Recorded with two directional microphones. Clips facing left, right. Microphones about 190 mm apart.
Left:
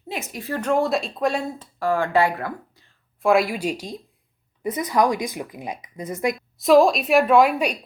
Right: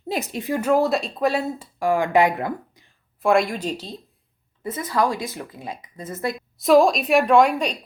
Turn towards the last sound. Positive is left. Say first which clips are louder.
# even
turn(degrees=5)  # may be behind; listen again after turning